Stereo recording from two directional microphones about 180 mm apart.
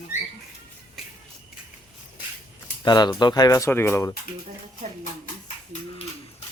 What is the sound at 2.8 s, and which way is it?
Speech, 25° left (ahead or behind).